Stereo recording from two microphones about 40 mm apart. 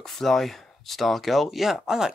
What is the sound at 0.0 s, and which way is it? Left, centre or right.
Speech, centre.